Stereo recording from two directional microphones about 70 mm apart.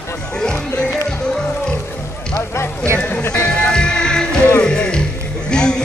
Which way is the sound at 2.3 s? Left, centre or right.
Left.